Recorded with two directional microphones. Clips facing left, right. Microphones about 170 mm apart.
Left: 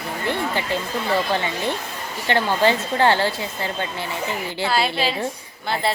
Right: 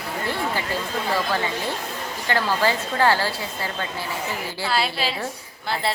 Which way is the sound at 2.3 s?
25° left (ahead or behind).